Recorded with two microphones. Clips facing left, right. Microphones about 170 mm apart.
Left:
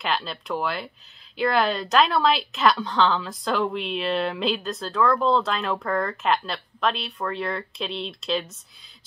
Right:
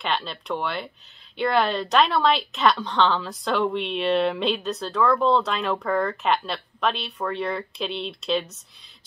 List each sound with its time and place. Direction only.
0.0 s a woman's voice: centre (ahead or behind)